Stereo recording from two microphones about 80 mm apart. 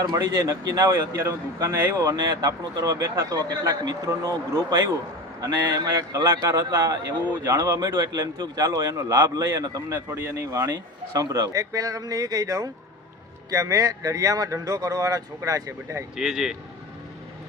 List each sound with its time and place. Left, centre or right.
0.0 s speech: right
0.9 s a man's voice: right
2.0 s speech: right
2.5 s speech: right
6.1 s a man's voice: right
9.9 s a man's voice: right
10.7 s a man's voice: right
16.1 s a man's voice: centre